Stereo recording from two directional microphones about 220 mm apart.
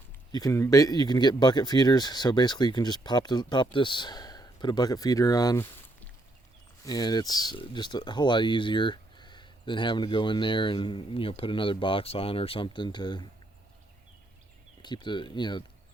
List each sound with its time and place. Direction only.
0.3 s speech: 15° left (ahead or behind)
14.8 s speech: 20° left (ahead or behind)